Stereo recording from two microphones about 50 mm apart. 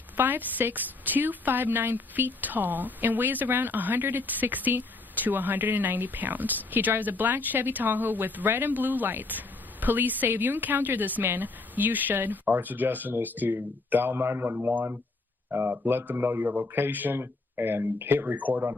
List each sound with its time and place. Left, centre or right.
0.2 s a woman's voice: right
14.6 s a woman's voice: right